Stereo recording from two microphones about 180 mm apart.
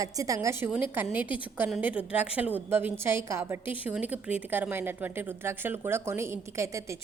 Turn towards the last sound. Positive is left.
turn(degrees=-15)  # may be behind; listen again after turning